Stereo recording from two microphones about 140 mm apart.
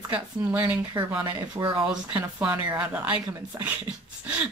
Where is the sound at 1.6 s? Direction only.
25° right (ahead or behind).